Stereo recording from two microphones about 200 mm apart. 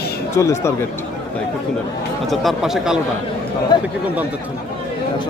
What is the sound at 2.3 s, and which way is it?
Speech, centre (ahead or behind).